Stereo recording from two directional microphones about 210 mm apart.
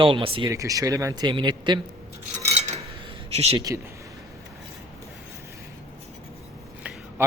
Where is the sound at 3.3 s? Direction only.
30° right (ahead or behind).